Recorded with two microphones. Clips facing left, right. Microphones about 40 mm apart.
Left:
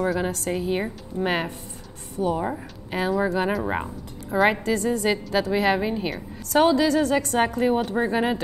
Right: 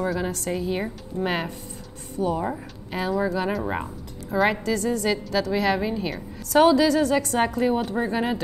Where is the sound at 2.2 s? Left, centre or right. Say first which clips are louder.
Left 1 dB; left.